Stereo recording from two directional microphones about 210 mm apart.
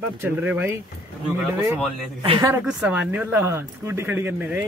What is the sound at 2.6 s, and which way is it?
Speech, 5° right (ahead or behind).